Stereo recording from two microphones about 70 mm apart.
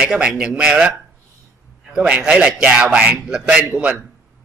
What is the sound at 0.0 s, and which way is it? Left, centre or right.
Speech, centre.